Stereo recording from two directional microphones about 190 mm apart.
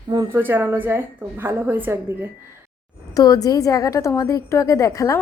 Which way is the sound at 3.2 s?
20° left (ahead or behind).